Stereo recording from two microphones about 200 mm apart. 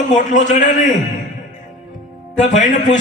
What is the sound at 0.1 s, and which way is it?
Speech, 40° left (ahead or behind).